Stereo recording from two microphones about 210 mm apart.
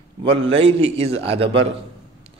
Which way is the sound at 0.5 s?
25° right (ahead or behind).